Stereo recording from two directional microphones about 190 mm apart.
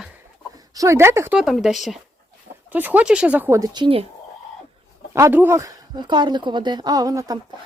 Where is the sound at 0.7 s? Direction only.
15° right (ahead or behind).